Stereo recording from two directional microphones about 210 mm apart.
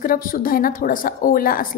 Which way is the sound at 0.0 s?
40° left (ahead or behind).